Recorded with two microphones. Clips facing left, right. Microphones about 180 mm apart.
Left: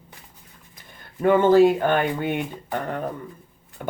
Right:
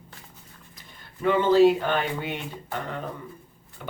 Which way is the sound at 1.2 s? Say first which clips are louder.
Left 3 dB; 50° left (ahead or behind).